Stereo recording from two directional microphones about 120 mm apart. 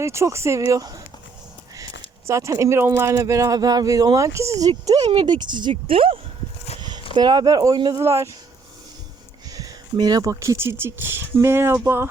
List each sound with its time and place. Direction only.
0.0 s speech: 25° right (ahead or behind)
5.1 s speech: 40° right (ahead or behind)
7.1 s speech: 35° right (ahead or behind)
9.5 s speech: 30° right (ahead or behind)